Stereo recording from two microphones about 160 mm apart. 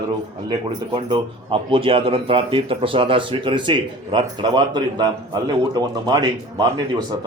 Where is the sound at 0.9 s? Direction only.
30° right (ahead or behind).